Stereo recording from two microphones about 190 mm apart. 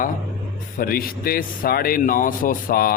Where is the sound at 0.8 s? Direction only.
50° left (ahead or behind).